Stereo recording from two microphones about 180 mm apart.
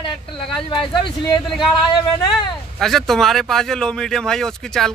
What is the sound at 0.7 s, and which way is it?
Speech, 25° left (ahead or behind).